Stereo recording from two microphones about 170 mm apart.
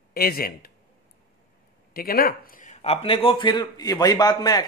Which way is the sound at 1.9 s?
60° left (ahead or behind).